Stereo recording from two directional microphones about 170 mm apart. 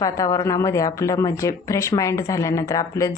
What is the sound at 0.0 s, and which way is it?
Speech, 20° left (ahead or behind).